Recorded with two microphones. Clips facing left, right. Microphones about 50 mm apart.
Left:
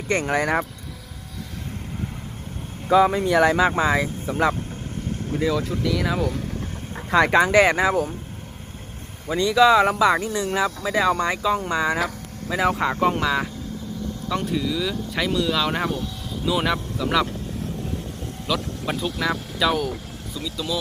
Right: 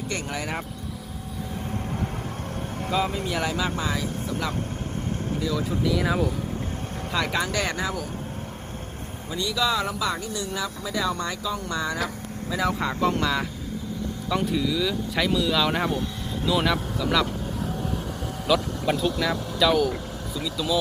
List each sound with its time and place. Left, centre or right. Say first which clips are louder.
0.3 s speech: left 9 dB; left
2.9 s speech: left 10 dB; left
3.8 s speech: left 7 dB; left
5.6 s speech: even; centre
7.1 s speech: left 9 dB; left
7.5 s speech: left 10 dB; left
9.3 s speech: left 9 dB; left
13.1 s speech: left 3 dB; centre
18.4 s speech: right 3 dB; centre
20.3 s speech: right 1 dB; centre